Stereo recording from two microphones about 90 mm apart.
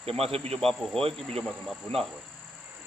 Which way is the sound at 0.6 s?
5° left (ahead or behind).